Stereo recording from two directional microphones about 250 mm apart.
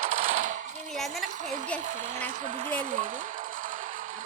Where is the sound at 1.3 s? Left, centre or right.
Right.